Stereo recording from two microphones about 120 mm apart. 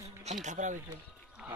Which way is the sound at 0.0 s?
65° right (ahead or behind).